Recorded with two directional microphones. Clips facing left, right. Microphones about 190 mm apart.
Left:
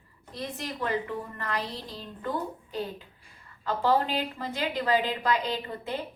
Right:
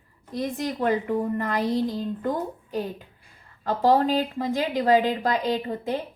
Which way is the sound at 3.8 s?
40° right (ahead or behind).